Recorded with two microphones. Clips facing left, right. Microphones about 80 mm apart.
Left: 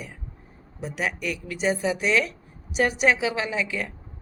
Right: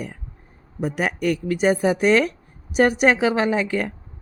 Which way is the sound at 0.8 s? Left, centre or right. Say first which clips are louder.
Right 6 dB; right.